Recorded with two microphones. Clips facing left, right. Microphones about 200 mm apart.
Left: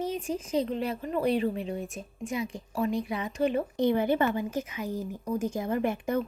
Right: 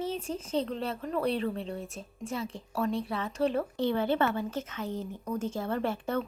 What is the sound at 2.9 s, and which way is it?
Speech, 30° right (ahead or behind).